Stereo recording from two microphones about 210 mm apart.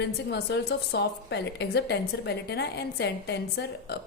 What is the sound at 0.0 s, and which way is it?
A woman's voice, 50° left (ahead or behind).